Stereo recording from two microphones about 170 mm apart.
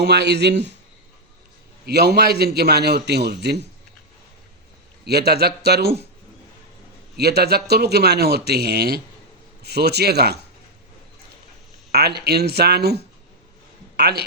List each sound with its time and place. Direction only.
0.0 s speech: 80° right
1.9 s a man's voice: 75° right (ahead or behind)
5.0 s a man's voice: 70° right (ahead or behind)
7.2 s a man's voice: 70° right (ahead or behind)
11.9 s a man's voice: 70° right (ahead or behind)